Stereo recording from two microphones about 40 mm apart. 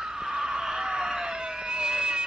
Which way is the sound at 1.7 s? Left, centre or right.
Right.